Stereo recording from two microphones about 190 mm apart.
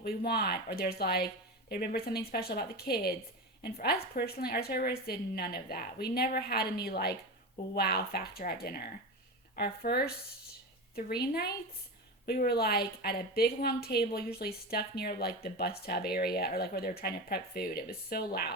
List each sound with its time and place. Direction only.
0.0 s a woman's voice: 55° left (ahead or behind)